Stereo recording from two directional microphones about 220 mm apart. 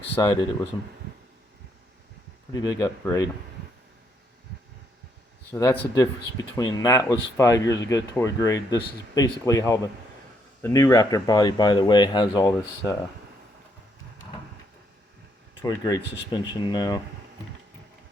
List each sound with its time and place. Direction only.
0.0 s speech: 20° left (ahead or behind)
2.5 s speech: 20° left (ahead or behind)
5.5 s speech: 15° left (ahead or behind)
15.6 s speech: 15° left (ahead or behind)